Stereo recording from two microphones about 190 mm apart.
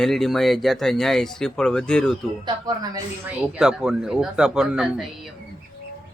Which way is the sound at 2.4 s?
20° right (ahead or behind).